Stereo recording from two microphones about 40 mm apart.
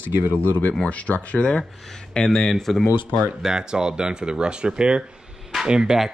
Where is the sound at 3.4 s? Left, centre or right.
Centre.